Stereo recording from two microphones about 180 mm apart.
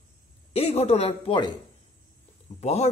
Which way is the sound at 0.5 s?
35° left (ahead or behind).